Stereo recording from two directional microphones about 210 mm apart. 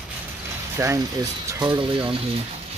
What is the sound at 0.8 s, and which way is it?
Speech, 15° right (ahead or behind).